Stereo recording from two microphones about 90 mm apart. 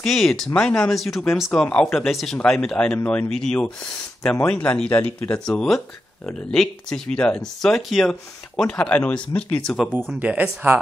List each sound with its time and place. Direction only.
0.0 s speech: 5° left (ahead or behind)
1.9 s speech: centre (ahead or behind); by 5.5 s 15° left (ahead or behind)
5.5 s speech: 5° left (ahead or behind)
9.7 s speech: 5° left (ahead or behind)
10.1 s speech: 15° right (ahead or behind)